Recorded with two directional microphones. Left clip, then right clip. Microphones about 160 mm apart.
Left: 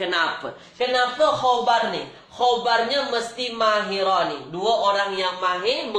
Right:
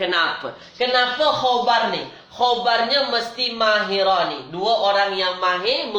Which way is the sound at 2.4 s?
25° left (ahead or behind).